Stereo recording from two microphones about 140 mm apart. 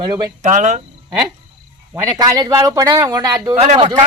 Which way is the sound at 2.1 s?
25° right (ahead or behind).